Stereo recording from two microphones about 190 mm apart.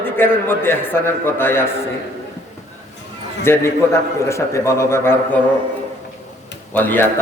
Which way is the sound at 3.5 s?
15° left (ahead or behind).